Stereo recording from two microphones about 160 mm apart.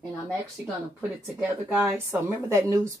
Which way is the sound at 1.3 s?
10° right (ahead or behind).